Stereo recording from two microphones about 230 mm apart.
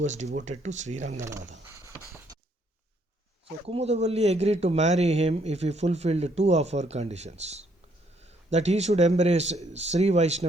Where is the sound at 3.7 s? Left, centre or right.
Right.